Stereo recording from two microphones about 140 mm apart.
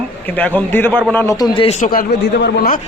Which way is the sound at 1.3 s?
30° left (ahead or behind).